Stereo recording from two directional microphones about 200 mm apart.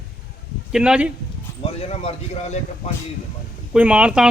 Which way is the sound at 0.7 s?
5° right (ahead or behind).